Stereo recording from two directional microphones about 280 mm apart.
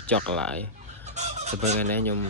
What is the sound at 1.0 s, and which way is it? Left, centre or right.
Fowl, right.